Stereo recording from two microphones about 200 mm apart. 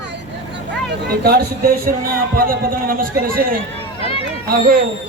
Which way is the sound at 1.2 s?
50° right (ahead or behind).